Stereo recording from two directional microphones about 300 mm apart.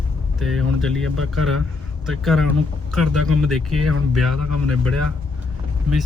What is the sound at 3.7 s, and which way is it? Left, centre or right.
Speech, right.